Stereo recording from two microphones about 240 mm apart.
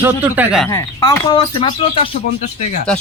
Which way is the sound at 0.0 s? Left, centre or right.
Centre.